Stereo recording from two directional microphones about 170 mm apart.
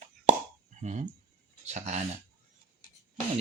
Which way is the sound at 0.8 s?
45° right (ahead or behind).